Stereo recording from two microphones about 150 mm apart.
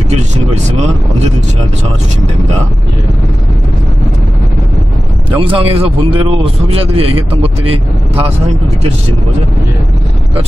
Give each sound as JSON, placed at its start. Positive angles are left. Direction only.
{"t": 5.3, "sound": "speech", "side_deg": -35}